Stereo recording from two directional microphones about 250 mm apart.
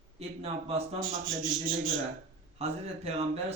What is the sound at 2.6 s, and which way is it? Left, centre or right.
Speech, right.